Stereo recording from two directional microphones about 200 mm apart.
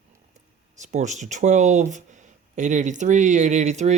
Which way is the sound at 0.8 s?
35° right (ahead or behind).